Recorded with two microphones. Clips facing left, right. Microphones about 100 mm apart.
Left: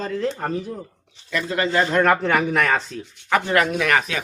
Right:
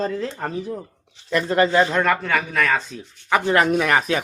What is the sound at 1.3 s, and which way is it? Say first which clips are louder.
Speech: right 5 dB; 35° right (ahead or behind).